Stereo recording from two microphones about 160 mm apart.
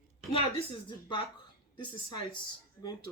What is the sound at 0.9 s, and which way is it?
Speech, 30° left (ahead or behind).